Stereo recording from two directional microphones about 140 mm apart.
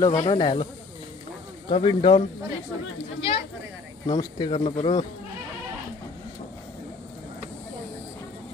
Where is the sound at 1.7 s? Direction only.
40° left (ahead or behind).